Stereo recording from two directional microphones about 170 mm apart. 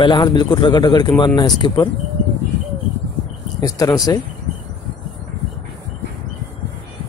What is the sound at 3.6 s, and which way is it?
Speech, 20° left (ahead or behind).